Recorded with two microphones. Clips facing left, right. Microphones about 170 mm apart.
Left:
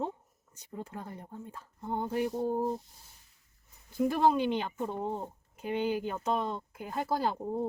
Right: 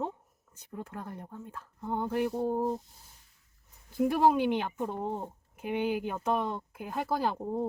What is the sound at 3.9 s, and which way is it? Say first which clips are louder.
Speech: right 1 dB; 10° right (ahead or behind).